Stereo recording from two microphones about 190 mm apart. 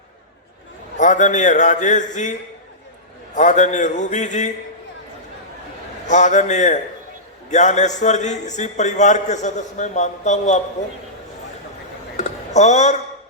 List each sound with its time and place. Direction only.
0.9 s a man's voice: 40° left (ahead or behind)
3.3 s a man's voice: 40° left (ahead or behind)
6.1 s a man's voice: 40° left (ahead or behind)
12.1 s a sound: 35° left (ahead or behind)